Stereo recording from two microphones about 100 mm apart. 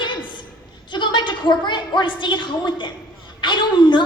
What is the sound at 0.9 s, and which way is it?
A woman's voice, 50° left (ahead or behind).